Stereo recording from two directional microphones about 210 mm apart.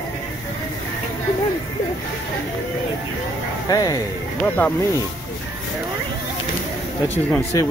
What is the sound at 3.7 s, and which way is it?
Speech, 15° left (ahead or behind).